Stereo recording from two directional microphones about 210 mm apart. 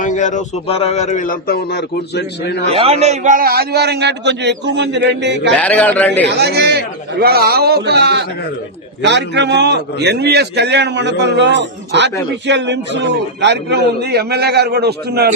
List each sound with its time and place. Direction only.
0.0 s a man's voice: 35° left (ahead or behind); by 2.6 s 55° left (ahead or behind)
2.7 s a man's voice: 30° right (ahead or behind); by 5.5 s 55° right (ahead or behind)
5.5 s a man's voice: 5° left (ahead or behind)
6.3 s a man's voice: 50° right (ahead or behind)